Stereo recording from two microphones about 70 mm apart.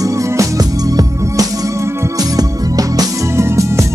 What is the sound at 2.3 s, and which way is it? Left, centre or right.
Music, right.